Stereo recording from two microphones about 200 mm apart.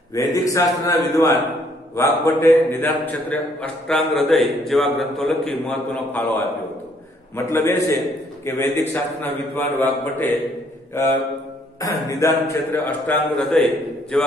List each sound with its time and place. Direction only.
0.1 s a man's voice: 15° left (ahead or behind)
11.8 s a man's voice: 15° left (ahead or behind)